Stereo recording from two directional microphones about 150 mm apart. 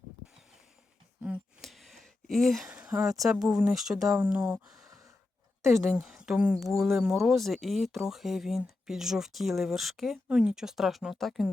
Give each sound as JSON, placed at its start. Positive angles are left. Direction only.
{"t": 1.2, "sound": "a sound", "side_deg": -5}
{"t": 2.6, "sound": "speech", "side_deg": -10}
{"t": 5.6, "sound": "speech", "side_deg": -20}
{"t": 6.0, "sound": "speech", "side_deg": -5}